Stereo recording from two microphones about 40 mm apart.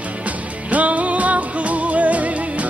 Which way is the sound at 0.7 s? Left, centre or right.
Right.